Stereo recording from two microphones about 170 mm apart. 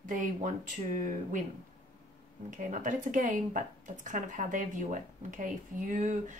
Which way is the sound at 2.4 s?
50° right (ahead or behind).